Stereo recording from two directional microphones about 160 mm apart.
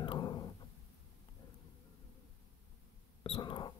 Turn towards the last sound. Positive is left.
turn(degrees=30)  # may be behind; listen again after turning